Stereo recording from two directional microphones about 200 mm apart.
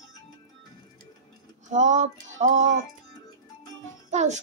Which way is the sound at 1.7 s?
35° right (ahead or behind).